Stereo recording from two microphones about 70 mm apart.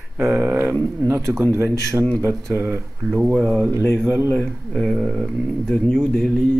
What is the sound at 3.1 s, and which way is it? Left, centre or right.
Speech, centre.